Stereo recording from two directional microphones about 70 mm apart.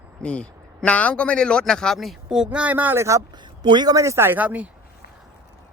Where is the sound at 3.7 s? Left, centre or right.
Right.